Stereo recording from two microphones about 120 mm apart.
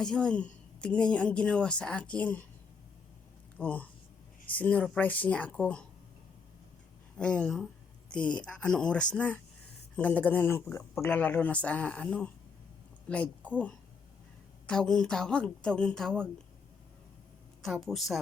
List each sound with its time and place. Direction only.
0.0 s a woman's voice: 5° left (ahead or behind)
3.6 s a woman's voice: 15° left (ahead or behind)
7.2 s a woman's voice: 10° left (ahead or behind)
14.7 s a woman's voice: 5° left (ahead or behind)
17.6 s a woman's voice: centre (ahead or behind)